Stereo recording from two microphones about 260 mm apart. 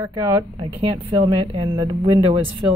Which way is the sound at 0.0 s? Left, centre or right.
Centre.